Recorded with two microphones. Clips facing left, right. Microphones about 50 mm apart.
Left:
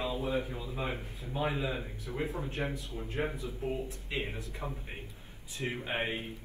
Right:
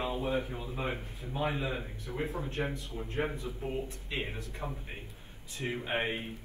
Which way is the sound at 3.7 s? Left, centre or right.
Right.